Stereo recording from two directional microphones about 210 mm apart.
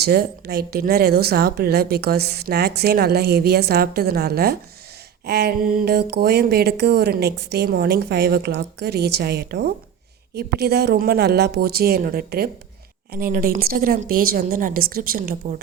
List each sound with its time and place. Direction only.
0.0 s a woman's voice: 50° right (ahead or behind)